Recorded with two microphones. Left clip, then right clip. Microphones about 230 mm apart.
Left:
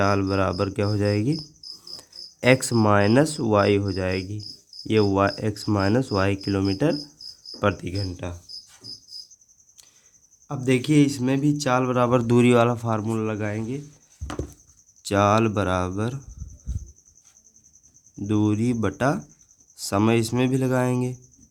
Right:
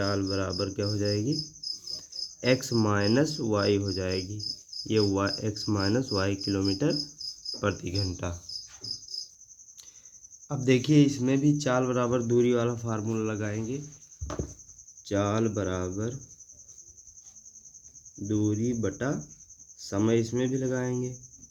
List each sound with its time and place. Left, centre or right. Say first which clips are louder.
0.0 s cricket: left 8 dB; left
2.0 s speech: left 3 dB; left
7.9 s speech: left 1 dB; centre
10.5 s speech: left 2 dB; centre
15.0 s speech: left 8 dB; left
18.3 s speech: left 5 dB; left